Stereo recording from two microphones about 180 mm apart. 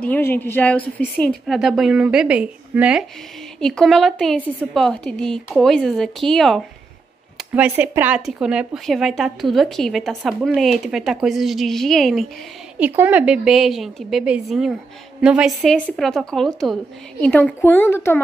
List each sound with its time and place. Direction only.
0.0 s a woman's voice: 10° left (ahead or behind)
12.7 s a woman's voice: 10° right (ahead or behind); by 18.2 s 15° left (ahead or behind)